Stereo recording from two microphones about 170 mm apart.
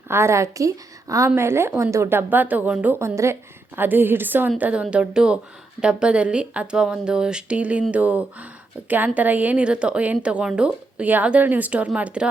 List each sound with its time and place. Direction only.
0.1 s a woman's voice: 15° right (ahead or behind)